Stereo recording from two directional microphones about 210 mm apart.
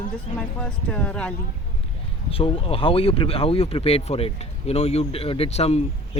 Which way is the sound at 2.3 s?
25° left (ahead or behind).